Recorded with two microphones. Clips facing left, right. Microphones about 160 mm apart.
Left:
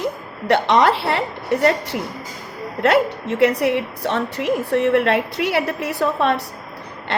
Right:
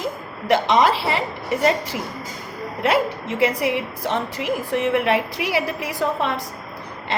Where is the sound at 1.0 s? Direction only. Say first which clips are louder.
Left 2 dB; 65° left (ahead or behind).